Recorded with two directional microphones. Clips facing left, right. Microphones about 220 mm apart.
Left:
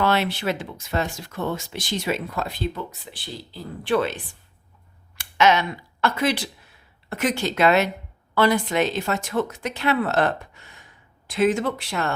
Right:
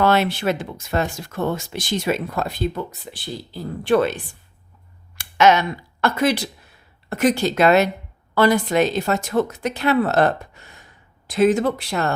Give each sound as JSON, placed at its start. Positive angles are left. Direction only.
{"t": 0.0, "sound": "a woman's voice", "side_deg": -45}